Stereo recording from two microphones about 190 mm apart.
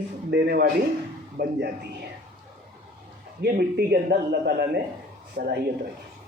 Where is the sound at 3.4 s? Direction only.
55° right (ahead or behind).